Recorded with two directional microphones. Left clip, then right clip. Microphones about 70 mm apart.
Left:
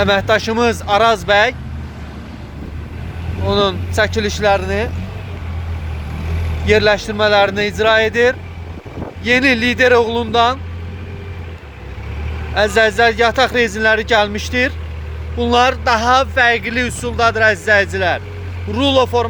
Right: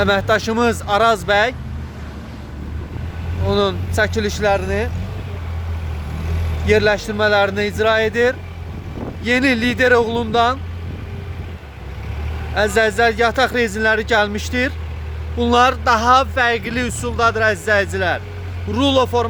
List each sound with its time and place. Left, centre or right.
0.0 s speech: right
3.4 s speech: right
6.7 s speech: right
12.5 s speech: right
15.7 s speech: right
18.7 s speech: right